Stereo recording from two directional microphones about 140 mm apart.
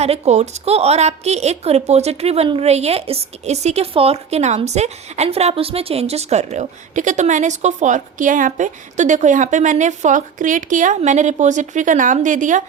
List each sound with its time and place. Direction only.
0.0 s a woman's voice: 50° right (ahead or behind)